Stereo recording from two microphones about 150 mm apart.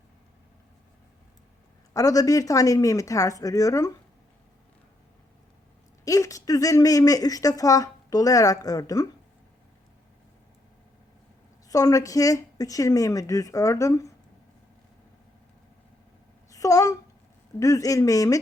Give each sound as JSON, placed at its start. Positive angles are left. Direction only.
{"t": 1.9, "sound": "speech", "side_deg": 25}
{"t": 6.1, "sound": "speech", "side_deg": 20}
{"t": 11.7, "sound": "speech", "side_deg": 25}
{"t": 16.5, "sound": "speech", "side_deg": 20}